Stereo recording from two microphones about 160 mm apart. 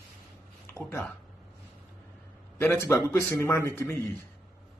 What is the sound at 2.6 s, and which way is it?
Speech, 10° left (ahead or behind).